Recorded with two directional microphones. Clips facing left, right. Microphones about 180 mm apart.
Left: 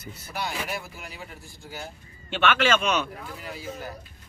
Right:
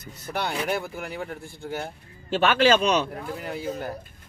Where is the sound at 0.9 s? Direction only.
55° right (ahead or behind).